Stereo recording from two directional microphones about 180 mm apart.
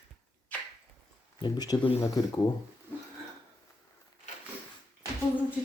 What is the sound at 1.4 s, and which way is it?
Speech, 20° left (ahead or behind).